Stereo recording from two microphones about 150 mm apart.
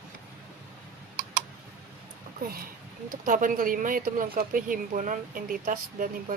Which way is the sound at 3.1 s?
65° right (ahead or behind).